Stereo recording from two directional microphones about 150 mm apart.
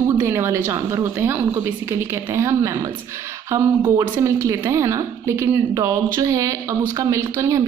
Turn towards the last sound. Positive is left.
turn(degrees=-20)  # may be behind; listen again after turning